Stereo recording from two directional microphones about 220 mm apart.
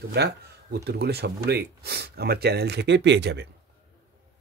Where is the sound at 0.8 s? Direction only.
45° right (ahead or behind).